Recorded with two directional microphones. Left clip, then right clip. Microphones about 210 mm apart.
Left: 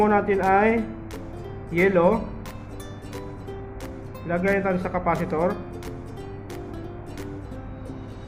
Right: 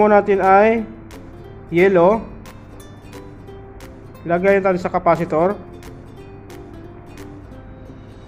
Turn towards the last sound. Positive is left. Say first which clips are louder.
# left 1 dB
turn(degrees=0)  # may be behind; listen again after turning